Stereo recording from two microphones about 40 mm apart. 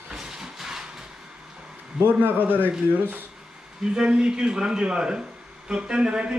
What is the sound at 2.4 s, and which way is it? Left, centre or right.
Speech, left.